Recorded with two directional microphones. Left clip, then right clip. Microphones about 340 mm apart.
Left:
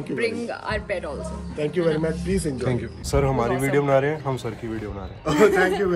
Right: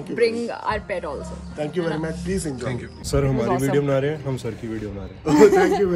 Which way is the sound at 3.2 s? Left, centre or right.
Centre.